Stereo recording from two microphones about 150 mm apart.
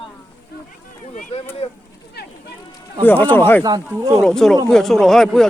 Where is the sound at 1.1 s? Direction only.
55° left (ahead or behind).